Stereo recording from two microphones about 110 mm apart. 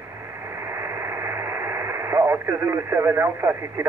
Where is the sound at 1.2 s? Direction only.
25° right (ahead or behind).